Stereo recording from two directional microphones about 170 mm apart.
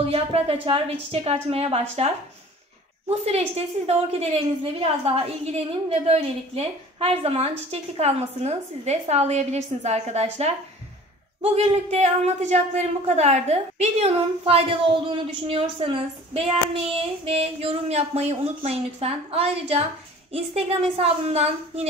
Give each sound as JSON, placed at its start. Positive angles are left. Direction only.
{"t": 0.1, "sound": "a woman's voice", "side_deg": -35}